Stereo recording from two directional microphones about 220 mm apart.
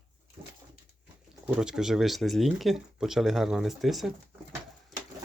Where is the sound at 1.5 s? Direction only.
5° right (ahead or behind).